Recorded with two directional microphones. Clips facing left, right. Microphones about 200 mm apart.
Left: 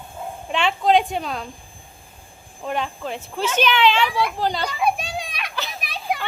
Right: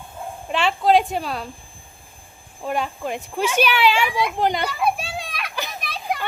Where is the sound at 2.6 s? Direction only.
10° right (ahead or behind).